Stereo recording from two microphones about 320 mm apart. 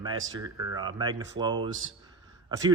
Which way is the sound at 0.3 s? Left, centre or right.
Centre.